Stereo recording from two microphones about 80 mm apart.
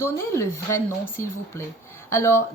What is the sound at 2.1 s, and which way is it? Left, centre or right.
Speech, left.